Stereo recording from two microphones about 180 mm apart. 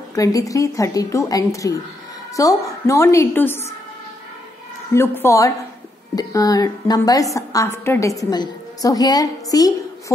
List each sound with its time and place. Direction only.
0.1 s a woman's voice: 20° left (ahead or behind)
4.9 s a woman's voice: 15° left (ahead or behind)